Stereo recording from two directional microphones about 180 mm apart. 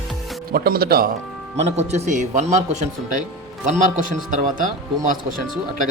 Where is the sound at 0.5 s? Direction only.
55° right (ahead or behind).